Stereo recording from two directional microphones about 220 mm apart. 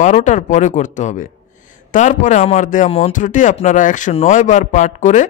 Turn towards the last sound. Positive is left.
turn(degrees=35)  # may be behind; listen again after turning